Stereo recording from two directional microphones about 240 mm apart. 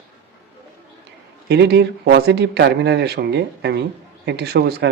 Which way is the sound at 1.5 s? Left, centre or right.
Right.